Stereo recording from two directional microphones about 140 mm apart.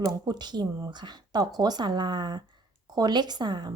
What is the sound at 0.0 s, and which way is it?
Speech, 30° right (ahead or behind).